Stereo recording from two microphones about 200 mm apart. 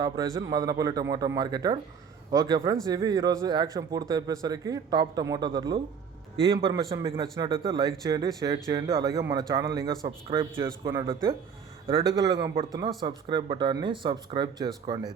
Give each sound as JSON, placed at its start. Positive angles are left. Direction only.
{"t": 0.0, "sound": "a man's voice", "side_deg": -20}